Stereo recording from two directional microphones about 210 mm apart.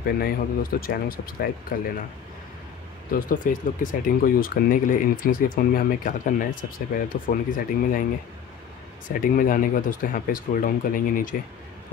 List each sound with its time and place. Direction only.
0.0 s speech: 45° left (ahead or behind)
3.1 s speech: 40° left (ahead or behind)
9.2 s speech: 40° left (ahead or behind)